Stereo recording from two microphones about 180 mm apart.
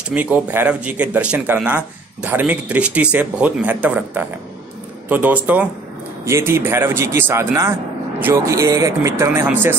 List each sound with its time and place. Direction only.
0.1 s speech: 10° right (ahead or behind)